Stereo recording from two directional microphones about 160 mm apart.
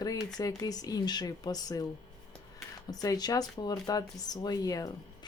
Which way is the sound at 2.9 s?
25° left (ahead or behind).